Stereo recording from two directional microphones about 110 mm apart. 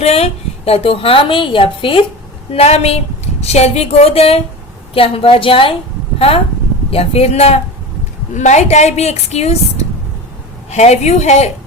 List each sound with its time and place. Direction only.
0.0 s a woman's voice: 70° left (ahead or behind); by 2.0 s 55° left (ahead or behind)
2.5 s speech: 70° left (ahead or behind)
4.9 s a woman's voice: 55° left (ahead or behind)
8.3 s speech: 90° left